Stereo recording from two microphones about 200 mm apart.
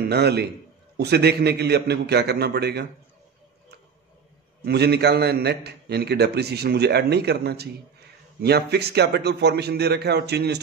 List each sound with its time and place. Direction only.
0.1 s a man's voice: 55° right (ahead or behind)
4.6 s a man's voice: 55° right (ahead or behind)